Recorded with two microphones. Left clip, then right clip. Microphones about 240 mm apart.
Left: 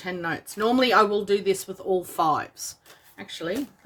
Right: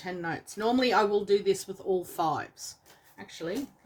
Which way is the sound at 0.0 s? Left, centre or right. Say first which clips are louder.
Left 5 dB; left.